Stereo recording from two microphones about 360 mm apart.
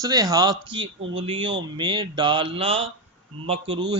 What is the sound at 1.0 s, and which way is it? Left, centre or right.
Speech, right.